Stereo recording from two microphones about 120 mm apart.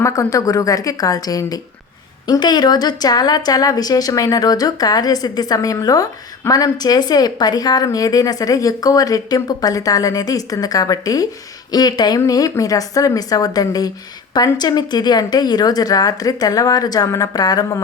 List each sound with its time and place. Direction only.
0.0 s a woman's voice: 25° left (ahead or behind)